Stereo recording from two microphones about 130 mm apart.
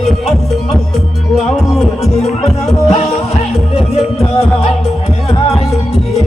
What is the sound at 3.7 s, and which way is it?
Music, 50° left (ahead or behind).